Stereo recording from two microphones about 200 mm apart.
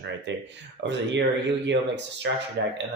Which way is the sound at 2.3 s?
60° right (ahead or behind).